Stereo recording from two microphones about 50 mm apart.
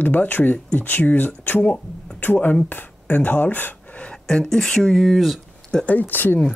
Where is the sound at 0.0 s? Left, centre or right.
Left.